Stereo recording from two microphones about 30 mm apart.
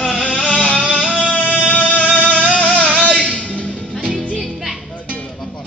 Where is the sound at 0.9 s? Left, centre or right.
Left.